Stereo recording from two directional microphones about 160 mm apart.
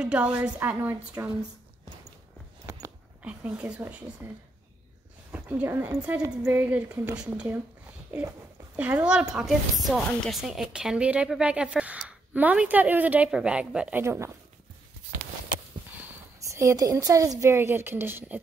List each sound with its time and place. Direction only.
0.0 s a woman's voice: 5° right (ahead or behind)
2.6 s a sound: 20° right (ahead or behind)
3.3 s a woman's voice: 5° right (ahead or behind)
16.0 s a woman's voice: 20° right (ahead or behind)